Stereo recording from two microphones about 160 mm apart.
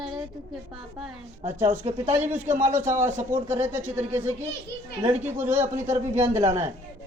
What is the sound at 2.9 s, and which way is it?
Speech, 50° right (ahead or behind).